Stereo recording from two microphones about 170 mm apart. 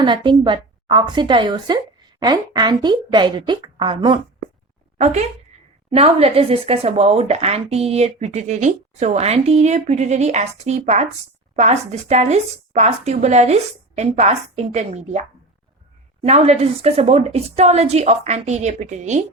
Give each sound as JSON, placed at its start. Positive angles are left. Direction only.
{"t": 0.0, "sound": "speech", "side_deg": -30}
{"t": 4.9, "sound": "speech", "side_deg": -40}